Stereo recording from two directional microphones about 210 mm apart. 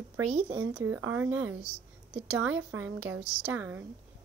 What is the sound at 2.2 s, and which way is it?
Speech, 70° right (ahead or behind).